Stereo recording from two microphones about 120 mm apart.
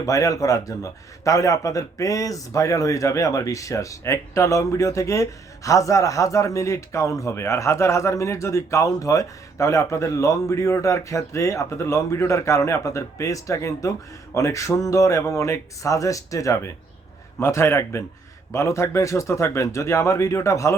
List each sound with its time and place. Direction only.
0.0 s a man's voice: 30° left (ahead or behind)